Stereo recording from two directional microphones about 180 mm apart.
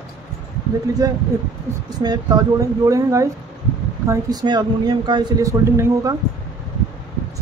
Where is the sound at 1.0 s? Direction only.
20° right (ahead or behind).